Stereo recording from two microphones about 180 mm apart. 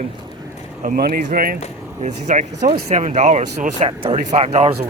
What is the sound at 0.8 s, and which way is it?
Speech, 55° right (ahead or behind).